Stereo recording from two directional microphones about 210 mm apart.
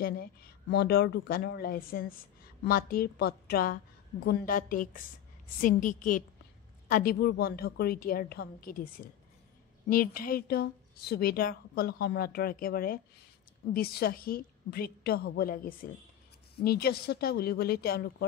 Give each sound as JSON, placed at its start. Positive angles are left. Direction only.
{"t": 0.0, "sound": "a woman's voice", "side_deg": 45}